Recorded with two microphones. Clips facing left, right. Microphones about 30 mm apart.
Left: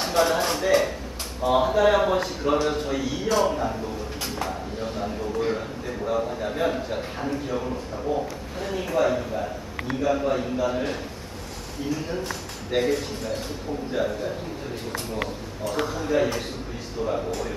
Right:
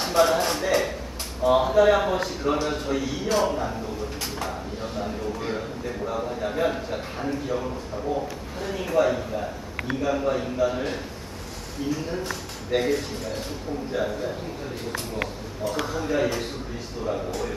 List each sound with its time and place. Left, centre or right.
0.0 s a man's voice: centre
5.0 s a man's voice: centre
12.2 s a man's voice: centre
15.8 s a man's voice: centre